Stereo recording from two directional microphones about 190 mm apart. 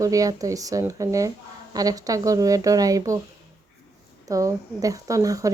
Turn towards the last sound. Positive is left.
turn(degrees=-15)  # may be behind; listen again after turning